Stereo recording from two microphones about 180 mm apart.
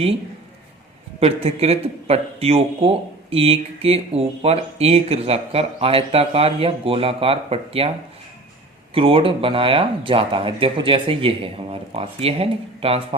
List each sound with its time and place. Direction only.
1.2 s speech: 35° right (ahead or behind)
9.0 s speech: 30° right (ahead or behind)